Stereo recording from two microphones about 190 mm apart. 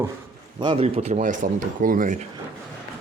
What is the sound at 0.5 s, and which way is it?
Speech, 25° right (ahead or behind).